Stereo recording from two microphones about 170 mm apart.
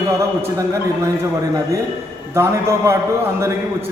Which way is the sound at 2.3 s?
15° right (ahead or behind).